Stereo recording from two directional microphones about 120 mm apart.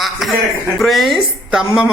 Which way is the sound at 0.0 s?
Centre (ahead or behind).